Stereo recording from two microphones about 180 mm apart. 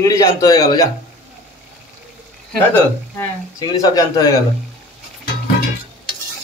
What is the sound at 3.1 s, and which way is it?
Speech, 20° left (ahead or behind).